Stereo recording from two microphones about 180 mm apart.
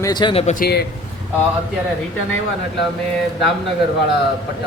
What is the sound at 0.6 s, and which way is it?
Speech, 60° left (ahead or behind).